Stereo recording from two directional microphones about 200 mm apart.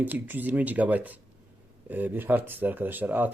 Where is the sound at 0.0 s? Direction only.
10° right (ahead or behind).